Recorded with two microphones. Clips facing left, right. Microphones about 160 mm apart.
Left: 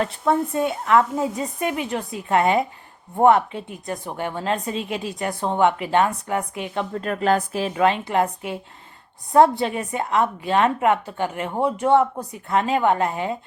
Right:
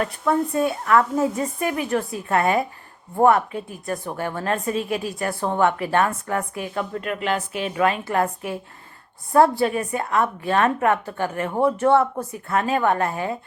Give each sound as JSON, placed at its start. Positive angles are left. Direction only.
{"t": 0.0, "sound": "a woman's voice", "side_deg": 25}